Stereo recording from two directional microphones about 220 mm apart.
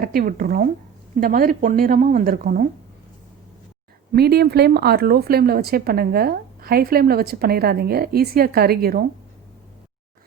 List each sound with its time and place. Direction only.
0.0 s a woman's voice: 40° right (ahead or behind)
4.1 s speech: 45° right (ahead or behind)